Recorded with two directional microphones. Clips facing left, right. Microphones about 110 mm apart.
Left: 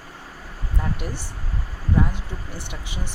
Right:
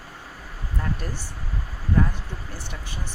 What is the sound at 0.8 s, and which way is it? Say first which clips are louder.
Speech: left 1 dB; 10° left (ahead or behind).